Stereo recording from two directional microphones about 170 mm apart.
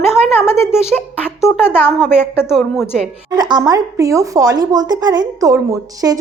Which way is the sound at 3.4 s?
25° right (ahead or behind).